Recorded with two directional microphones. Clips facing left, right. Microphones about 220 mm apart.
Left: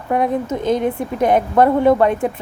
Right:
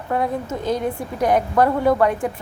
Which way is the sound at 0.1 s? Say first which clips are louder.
Left 4 dB; 20° left (ahead or behind).